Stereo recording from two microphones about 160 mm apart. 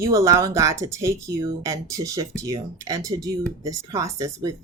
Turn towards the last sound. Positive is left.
turn(degrees=-20)  # may be behind; listen again after turning